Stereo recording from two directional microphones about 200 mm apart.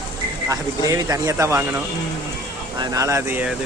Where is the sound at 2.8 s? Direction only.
15° right (ahead or behind).